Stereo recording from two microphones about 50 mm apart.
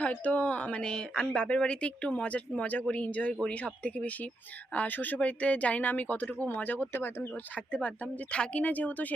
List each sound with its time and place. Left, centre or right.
0.0 s speech: left
0.8 s speech: centre; by 7.3 s left
7.5 s speech: left